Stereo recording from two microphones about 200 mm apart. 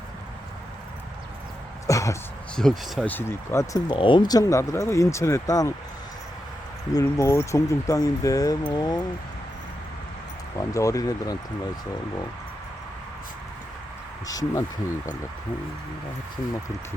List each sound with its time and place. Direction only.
1.9 s throat clearing: 15° left (ahead or behind)
2.6 s speech: centre (ahead or behind)
6.9 s speech: 15° left (ahead or behind)
10.6 s speech: 15° left (ahead or behind)
14.3 s speech: 15° left (ahead or behind)